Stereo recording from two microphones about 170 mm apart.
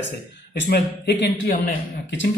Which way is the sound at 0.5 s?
65° left (ahead or behind).